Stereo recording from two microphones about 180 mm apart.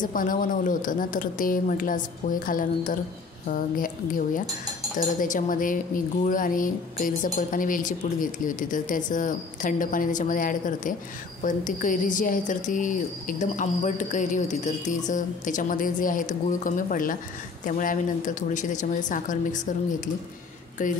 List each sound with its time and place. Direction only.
0.0 s speech: 50° left (ahead or behind)
20.8 s speech: 45° left (ahead or behind)